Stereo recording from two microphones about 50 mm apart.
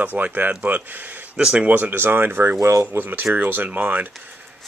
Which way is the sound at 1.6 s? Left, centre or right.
Right.